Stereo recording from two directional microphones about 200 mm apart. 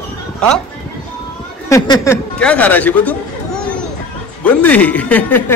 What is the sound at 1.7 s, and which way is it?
A man's voice, 15° left (ahead or behind).